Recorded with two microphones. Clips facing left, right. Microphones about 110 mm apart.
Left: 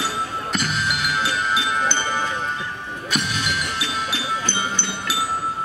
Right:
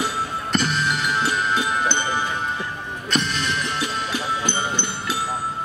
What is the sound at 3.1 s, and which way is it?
Music, 5° left (ahead or behind).